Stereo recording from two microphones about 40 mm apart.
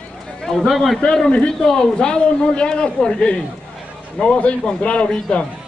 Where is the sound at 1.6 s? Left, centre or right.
Centre.